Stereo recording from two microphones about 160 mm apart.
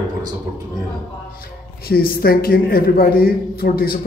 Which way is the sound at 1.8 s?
70° left (ahead or behind).